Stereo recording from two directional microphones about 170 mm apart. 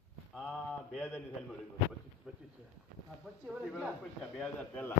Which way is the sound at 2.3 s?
5° right (ahead or behind).